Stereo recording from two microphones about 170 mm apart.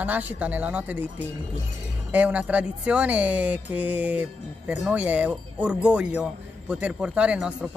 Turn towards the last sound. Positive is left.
turn(degrees=-5)  # may be behind; listen again after turning